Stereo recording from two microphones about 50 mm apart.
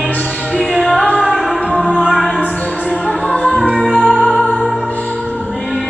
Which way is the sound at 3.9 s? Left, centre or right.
Centre.